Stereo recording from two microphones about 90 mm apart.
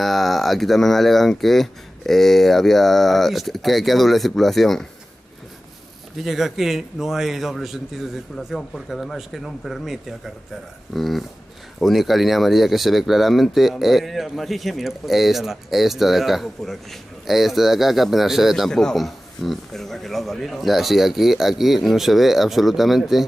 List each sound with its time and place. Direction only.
0.0 s speech: centre (ahead or behind)
6.2 s speech: centre (ahead or behind)